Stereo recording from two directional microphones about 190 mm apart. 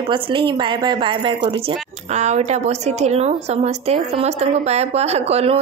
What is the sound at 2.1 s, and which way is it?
A woman's voice, 35° right (ahead or behind).